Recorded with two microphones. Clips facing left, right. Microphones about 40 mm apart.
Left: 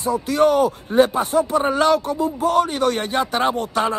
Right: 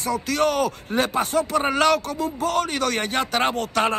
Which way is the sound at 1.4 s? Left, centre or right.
Right.